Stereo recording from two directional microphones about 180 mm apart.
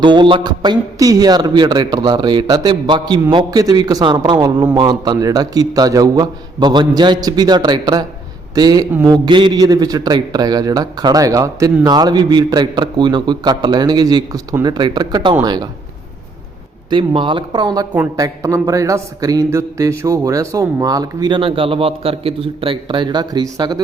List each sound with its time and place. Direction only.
0.0 s speech: 25° right (ahead or behind)
16.9 s speech: 25° right (ahead or behind)